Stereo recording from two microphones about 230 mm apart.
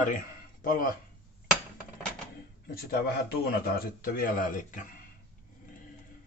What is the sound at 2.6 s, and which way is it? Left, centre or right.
Speech, left.